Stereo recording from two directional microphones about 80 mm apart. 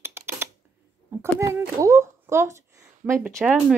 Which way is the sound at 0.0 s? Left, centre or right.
Right.